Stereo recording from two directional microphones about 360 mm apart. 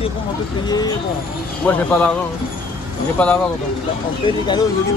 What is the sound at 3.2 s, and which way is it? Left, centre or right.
Speech, centre.